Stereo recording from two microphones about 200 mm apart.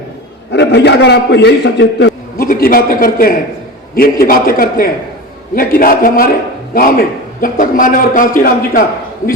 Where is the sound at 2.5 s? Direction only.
45° left (ahead or behind).